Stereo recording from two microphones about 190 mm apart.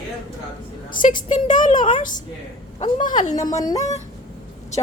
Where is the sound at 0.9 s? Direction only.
45° left (ahead or behind).